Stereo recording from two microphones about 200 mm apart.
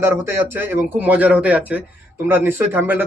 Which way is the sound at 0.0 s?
10° right (ahead or behind).